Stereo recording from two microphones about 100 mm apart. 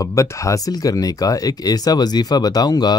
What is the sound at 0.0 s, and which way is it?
Speech, 30° left (ahead or behind).